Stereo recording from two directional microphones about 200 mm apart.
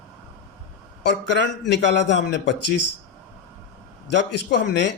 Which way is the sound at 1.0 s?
60° left (ahead or behind).